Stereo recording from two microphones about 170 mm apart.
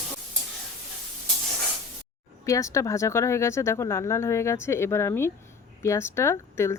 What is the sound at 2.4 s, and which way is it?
Speech, 20° left (ahead or behind).